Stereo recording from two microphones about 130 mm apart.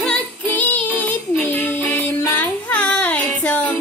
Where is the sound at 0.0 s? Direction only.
10° left (ahead or behind).